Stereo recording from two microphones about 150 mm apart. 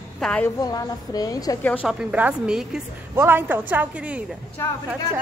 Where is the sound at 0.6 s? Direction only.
25° left (ahead or behind).